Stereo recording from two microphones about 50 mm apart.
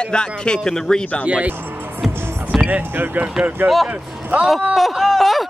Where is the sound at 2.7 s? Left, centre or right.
Right.